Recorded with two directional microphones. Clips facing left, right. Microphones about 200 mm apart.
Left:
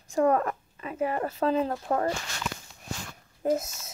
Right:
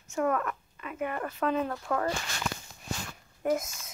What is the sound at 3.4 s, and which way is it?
Speech, 30° left (ahead or behind).